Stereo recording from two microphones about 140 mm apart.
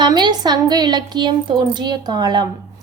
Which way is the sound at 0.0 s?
30° right (ahead or behind).